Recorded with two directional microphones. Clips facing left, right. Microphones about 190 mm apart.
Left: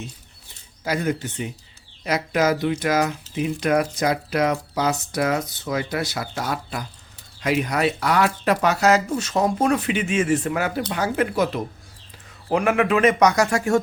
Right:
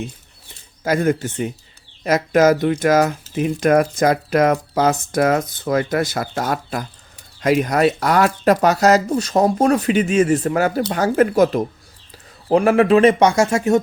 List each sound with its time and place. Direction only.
0.9 s speech: 50° right (ahead or behind); by 13.7 s 25° right (ahead or behind)